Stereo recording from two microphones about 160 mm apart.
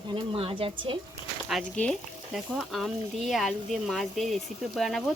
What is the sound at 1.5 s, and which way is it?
Speech, centre (ahead or behind).